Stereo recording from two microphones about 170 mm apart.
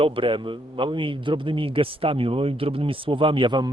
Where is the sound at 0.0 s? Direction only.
30° right (ahead or behind).